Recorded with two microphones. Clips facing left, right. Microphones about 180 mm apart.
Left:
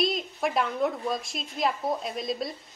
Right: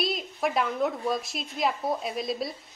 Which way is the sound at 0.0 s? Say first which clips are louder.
Left 1 dB; centre (ahead or behind).